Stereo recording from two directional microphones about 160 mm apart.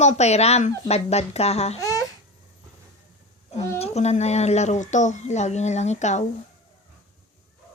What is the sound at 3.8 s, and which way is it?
Speech, 40° left (ahead or behind).